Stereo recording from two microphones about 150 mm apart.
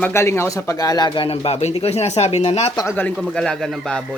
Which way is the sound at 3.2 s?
Centre (ahead or behind).